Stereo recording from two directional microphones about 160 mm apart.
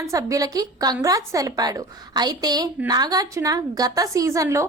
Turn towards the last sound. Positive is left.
turn(degrees=-20)  # may be behind; listen again after turning